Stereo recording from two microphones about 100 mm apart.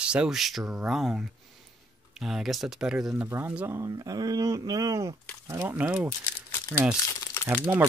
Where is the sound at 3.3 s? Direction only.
25° right (ahead or behind).